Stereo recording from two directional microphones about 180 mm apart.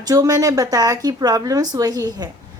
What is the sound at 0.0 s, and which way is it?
A woman's voice, 20° right (ahead or behind).